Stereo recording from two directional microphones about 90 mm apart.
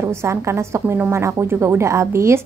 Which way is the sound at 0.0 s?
30° right (ahead or behind).